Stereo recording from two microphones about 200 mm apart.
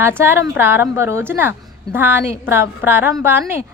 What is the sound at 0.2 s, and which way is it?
A woman's voice, 10° right (ahead or behind).